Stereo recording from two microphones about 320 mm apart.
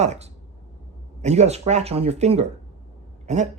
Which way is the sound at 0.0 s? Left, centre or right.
Right.